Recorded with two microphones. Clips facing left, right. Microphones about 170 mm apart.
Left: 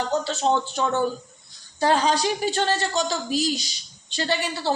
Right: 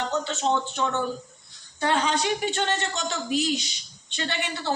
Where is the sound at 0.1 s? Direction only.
35° left (ahead or behind).